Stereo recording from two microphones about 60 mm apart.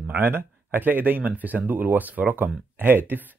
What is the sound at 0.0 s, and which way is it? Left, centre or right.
Speech, right.